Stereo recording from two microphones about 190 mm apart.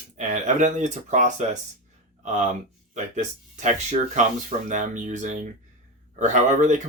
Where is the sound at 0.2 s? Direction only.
40° right (ahead or behind).